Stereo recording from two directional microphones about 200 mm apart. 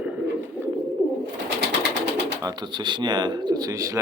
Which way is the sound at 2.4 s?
20° right (ahead or behind).